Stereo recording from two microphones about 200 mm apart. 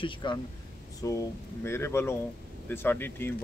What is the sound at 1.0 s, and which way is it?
Speech, 15° left (ahead or behind).